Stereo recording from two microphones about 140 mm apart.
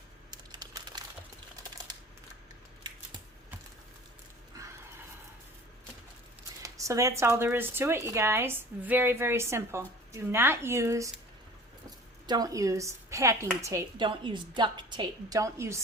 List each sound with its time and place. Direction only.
0.3 s crumpling: 30° right (ahead or behind)
4.5 s horse: 25° right (ahead or behind)
6.6 s a sound: 20° right (ahead or behind)
7.2 s a woman's voice: 15° right (ahead or behind)
12.2 s a woman's voice: 30° right (ahead or behind)
14.0 s a woman's voice: 35° right (ahead or behind)